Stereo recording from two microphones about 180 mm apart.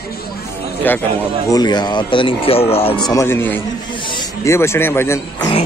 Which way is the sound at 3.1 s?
15° left (ahead or behind).